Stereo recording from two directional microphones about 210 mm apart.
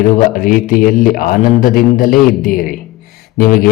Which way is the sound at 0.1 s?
40° left (ahead or behind).